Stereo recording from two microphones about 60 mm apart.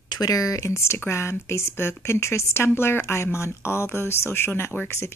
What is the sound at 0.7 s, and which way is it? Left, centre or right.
Speech, left.